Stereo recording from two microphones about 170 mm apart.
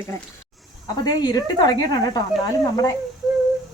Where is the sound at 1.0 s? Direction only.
20° left (ahead or behind).